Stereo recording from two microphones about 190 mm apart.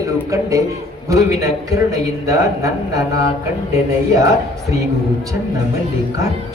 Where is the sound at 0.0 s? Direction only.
15° right (ahead or behind).